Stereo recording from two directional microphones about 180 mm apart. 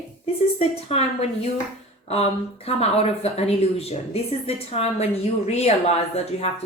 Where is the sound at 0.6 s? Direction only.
35° left (ahead or behind).